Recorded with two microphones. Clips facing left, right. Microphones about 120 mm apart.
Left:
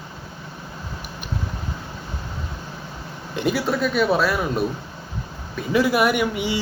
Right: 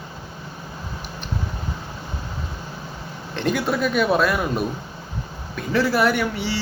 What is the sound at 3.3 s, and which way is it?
Speech, 5° left (ahead or behind).